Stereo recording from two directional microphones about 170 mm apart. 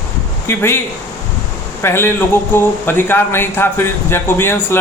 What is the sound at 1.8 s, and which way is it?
A man's voice, 15° left (ahead or behind).